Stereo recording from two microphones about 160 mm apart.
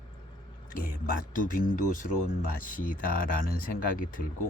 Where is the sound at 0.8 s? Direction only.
60° left (ahead or behind).